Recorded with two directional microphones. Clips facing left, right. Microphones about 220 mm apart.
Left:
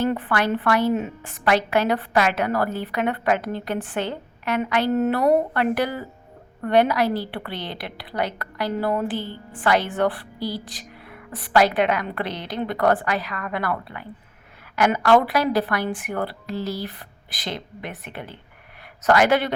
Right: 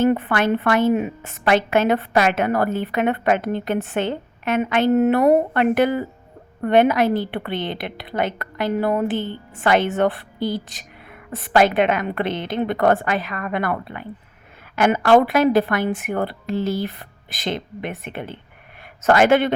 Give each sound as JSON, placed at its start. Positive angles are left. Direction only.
{"t": 0.0, "sound": "a woman's voice", "side_deg": -20}